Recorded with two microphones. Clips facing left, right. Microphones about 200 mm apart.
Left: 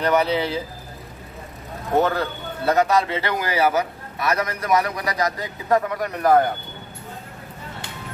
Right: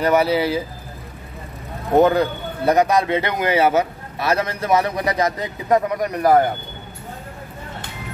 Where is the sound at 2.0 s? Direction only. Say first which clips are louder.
Right 6 dB; 15° right (ahead or behind).